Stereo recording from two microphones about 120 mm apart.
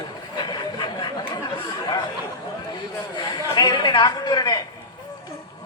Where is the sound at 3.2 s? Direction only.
35° left (ahead or behind).